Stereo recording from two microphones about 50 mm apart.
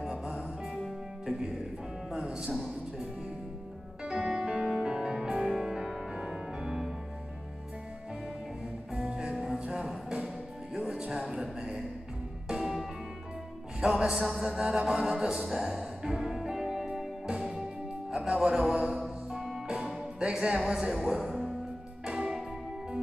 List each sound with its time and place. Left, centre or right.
0.0 s music: centre
4.0 s music: centre
8.9 s music: centre
11.1 s a sound: centre
13.7 s music: centre
22.0 s music: centre